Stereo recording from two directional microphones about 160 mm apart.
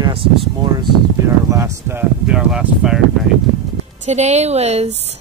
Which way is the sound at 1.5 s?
15° right (ahead or behind).